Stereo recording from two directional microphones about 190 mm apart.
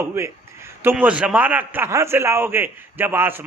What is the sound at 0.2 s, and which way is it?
A man's voice, 15° right (ahead or behind).